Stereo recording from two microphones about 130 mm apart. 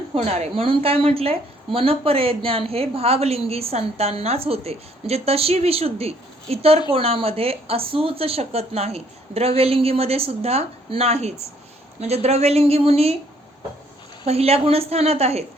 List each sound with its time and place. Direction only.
0.1 s a woman's voice: 55° right (ahead or behind)
14.3 s a woman's voice: 50° right (ahead or behind)